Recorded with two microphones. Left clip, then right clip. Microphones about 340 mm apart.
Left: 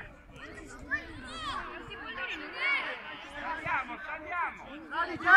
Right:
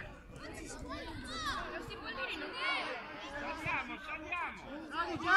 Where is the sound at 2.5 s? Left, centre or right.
Centre.